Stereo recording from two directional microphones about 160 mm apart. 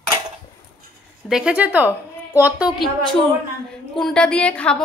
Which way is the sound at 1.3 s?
5° right (ahead or behind).